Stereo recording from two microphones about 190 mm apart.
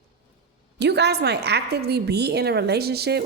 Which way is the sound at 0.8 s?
65° right (ahead or behind).